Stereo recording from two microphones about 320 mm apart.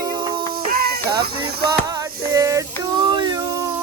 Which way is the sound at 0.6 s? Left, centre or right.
Right.